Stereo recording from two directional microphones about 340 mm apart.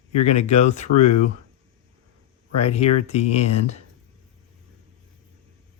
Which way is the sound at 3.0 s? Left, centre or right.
Centre.